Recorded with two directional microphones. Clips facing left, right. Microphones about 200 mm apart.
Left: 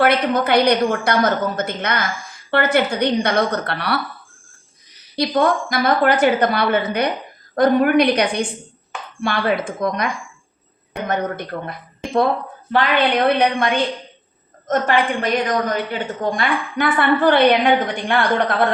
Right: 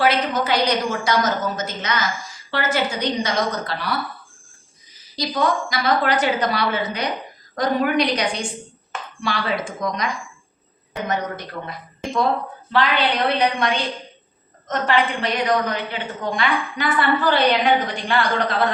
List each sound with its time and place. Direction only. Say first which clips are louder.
0.0 s a woman's voice: left 3 dB; 60° left (ahead or behind)
11.1 s a woman's voice: left 4 dB; 55° left (ahead or behind)
13.6 s a woman's voice: left 3 dB; 55° left (ahead or behind)